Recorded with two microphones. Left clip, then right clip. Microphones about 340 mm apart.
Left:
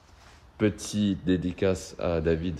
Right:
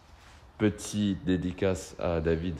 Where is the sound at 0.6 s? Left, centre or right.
Centre.